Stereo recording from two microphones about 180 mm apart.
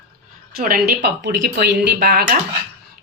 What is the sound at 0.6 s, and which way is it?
Speech, 55° right (ahead or behind).